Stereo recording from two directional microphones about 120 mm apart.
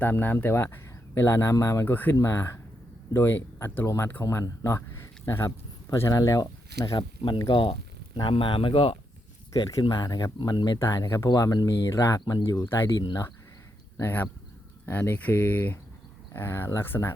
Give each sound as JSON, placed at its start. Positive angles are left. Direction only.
{"t": 0.0, "sound": "speech", "side_deg": 15}
{"t": 9.5, "sound": "speech", "side_deg": 40}
{"t": 10.8, "sound": "speech", "side_deg": 25}
{"t": 12.6, "sound": "speech", "side_deg": 20}
{"t": 13.0, "sound": "speech", "side_deg": 35}
{"t": 13.9, "sound": "speech", "side_deg": 15}